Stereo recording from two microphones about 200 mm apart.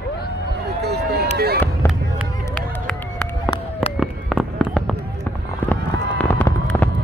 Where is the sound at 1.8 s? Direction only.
10° left (ahead or behind).